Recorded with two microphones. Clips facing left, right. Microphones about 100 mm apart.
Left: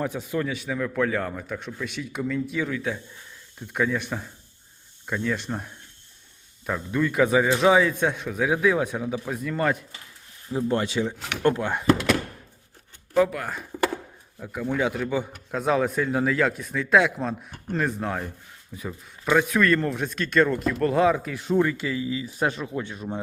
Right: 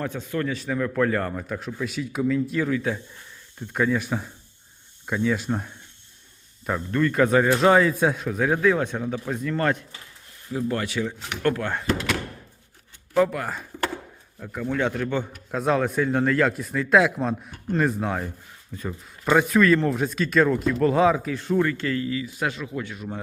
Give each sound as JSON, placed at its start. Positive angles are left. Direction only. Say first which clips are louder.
{"t": 0.0, "sound": "speech", "louder": "left 1 dB", "side_deg": 15}
{"t": 0.4, "sound": "speech", "louder": "right 2 dB", "side_deg": 5}
{"t": 10.5, "sound": "speech", "louder": "left 2 dB", "side_deg": 25}
{"t": 13.1, "sound": "speech", "louder": "even", "side_deg": 0}
{"t": 21.3, "sound": "speech", "louder": "even", "side_deg": 15}
{"t": 22.3, "sound": "speech", "louder": "left 2 dB", "side_deg": 35}